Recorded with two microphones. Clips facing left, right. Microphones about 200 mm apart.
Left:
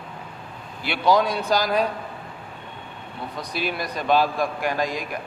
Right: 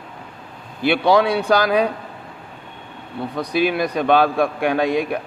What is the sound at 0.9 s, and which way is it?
Speech, 70° right (ahead or behind).